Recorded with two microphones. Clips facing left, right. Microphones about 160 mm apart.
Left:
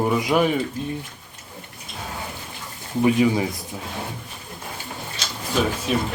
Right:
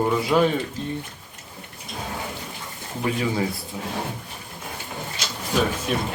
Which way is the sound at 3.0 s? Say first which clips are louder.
Left 6 dB; 15° left (ahead or behind).